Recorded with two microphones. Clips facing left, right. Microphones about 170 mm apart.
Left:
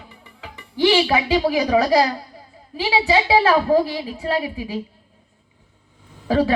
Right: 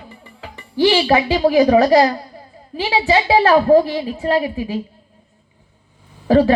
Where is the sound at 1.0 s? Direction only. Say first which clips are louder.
Right 4 dB; 40° right (ahead or behind).